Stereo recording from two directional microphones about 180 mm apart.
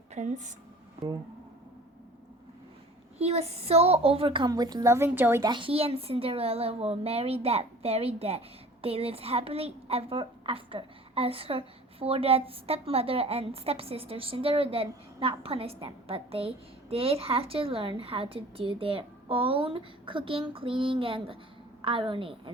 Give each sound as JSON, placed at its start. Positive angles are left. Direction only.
{"t": 0.1, "sound": "a woman's voice", "side_deg": -40}
{"t": 3.2, "sound": "a woman's voice", "side_deg": -35}
{"t": 5.5, "sound": "a woman's voice", "side_deg": -30}